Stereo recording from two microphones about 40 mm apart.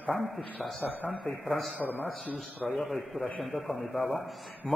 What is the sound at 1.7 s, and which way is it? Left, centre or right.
Speech, left.